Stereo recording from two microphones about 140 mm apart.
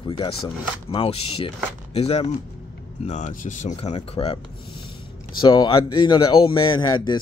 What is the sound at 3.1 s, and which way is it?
Speech, 60° left (ahead or behind).